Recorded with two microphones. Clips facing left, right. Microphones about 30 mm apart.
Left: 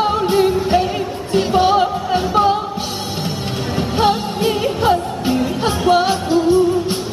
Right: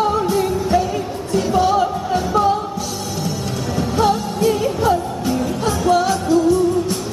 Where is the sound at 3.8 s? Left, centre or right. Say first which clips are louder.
Left 1 dB; left.